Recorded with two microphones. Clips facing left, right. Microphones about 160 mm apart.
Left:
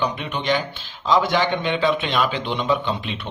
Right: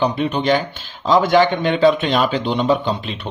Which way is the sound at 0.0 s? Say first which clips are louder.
Right 6 dB; 35° right (ahead or behind).